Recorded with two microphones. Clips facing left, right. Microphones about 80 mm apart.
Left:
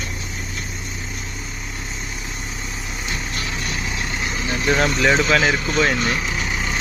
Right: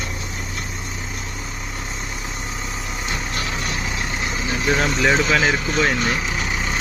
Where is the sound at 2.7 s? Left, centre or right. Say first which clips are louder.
Right 1 dB; right.